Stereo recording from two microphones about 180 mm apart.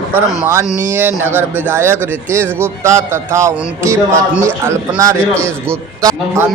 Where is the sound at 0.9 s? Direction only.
10° right (ahead or behind).